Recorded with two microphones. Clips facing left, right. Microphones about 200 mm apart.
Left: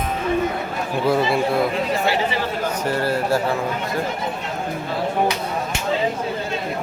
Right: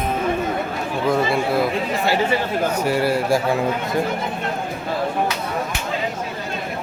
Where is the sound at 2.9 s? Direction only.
10° right (ahead or behind).